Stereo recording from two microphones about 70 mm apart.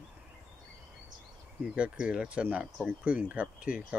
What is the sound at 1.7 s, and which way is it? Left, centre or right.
Speech, centre.